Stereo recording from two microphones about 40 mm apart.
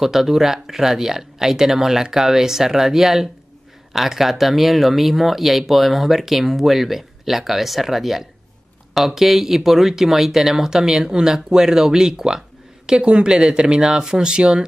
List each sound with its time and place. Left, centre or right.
0.0 s speech: centre